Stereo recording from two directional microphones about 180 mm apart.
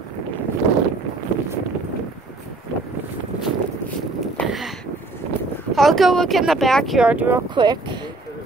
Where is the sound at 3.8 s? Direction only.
5° left (ahead or behind).